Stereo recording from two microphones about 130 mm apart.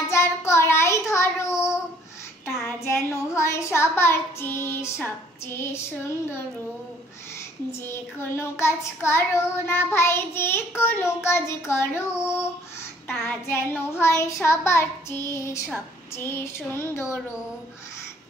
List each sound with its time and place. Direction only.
0.0 s child singing: 20° left (ahead or behind)
2.4 s a child's voice: 20° left (ahead or behind)
5.0 s child singing: 20° left (ahead or behind)
7.8 s child singing: 20° left (ahead or behind)
13.2 s child singing: 15° left (ahead or behind)